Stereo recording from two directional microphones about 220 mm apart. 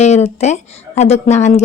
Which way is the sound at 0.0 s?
30° left (ahead or behind).